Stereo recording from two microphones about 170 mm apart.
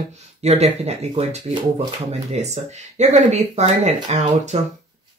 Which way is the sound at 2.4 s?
40° right (ahead or behind).